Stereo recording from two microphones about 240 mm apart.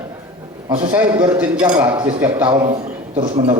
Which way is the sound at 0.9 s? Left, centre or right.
Centre.